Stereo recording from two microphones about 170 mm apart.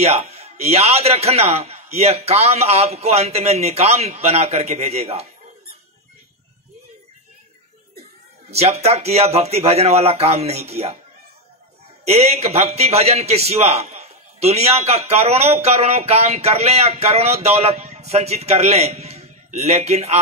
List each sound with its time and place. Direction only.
0.0 s a man's voice: 40° right (ahead or behind)
8.5 s a man's voice: 40° right (ahead or behind)
12.1 s a man's voice: 40° right (ahead or behind)